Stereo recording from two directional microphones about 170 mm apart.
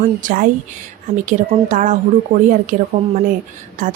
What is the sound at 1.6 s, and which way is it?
Speech, 50° right (ahead or behind).